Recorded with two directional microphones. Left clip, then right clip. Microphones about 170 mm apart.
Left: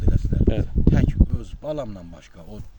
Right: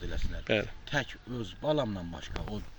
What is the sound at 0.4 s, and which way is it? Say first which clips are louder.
Speech: left 5 dB; 30° left (ahead or behind).